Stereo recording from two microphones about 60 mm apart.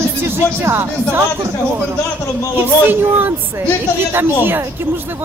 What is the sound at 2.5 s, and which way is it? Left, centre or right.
Speech, right.